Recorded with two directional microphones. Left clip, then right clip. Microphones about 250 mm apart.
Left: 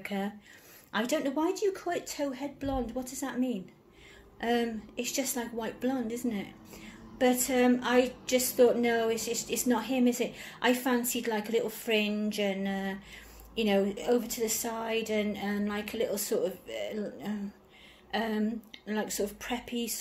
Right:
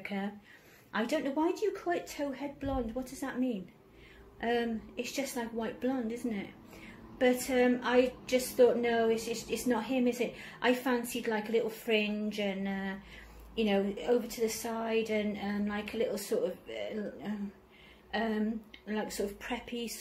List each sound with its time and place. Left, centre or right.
0.0 s a woman's voice: left